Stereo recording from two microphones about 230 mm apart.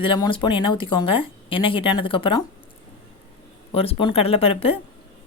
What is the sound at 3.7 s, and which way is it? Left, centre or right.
Speech, left.